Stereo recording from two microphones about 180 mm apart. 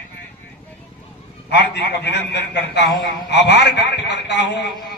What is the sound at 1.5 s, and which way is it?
A man's voice, 70° left (ahead or behind).